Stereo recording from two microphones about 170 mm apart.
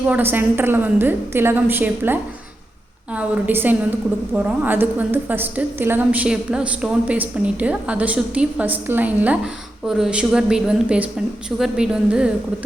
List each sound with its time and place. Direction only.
0.1 s a woman's voice: 10° right (ahead or behind)